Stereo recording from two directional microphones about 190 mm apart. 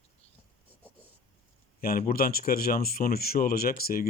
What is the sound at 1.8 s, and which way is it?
Speech, 50° left (ahead or behind).